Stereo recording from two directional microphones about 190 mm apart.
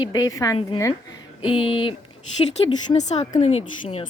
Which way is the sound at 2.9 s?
35° left (ahead or behind).